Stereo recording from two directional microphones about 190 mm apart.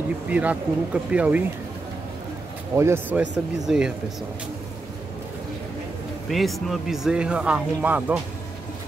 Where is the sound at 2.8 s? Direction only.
10° right (ahead or behind).